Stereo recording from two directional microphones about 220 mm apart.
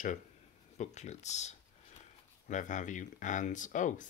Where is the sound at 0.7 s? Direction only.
30° left (ahead or behind).